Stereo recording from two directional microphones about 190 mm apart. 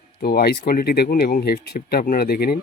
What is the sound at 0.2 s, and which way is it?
Speech, 55° left (ahead or behind).